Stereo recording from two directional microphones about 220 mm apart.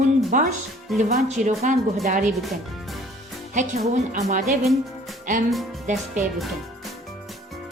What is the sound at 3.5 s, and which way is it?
Speech, 35° right (ahead or behind).